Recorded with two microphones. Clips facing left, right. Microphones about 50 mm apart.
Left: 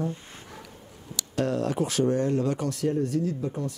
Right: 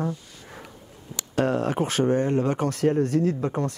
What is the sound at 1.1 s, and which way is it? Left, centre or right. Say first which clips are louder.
Speech: right 3 dB; right.